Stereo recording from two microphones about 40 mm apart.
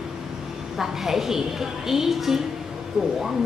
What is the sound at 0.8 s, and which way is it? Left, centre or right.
A woman's voice, centre.